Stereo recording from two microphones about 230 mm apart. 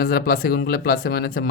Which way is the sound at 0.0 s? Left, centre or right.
Left.